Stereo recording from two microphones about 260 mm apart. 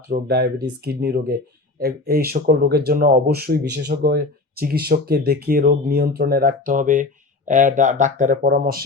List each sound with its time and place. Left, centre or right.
0.1 s speech: right